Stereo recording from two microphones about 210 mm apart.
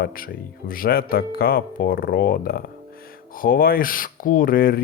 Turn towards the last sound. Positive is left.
turn(degrees=45)  # may be behind; listen again after turning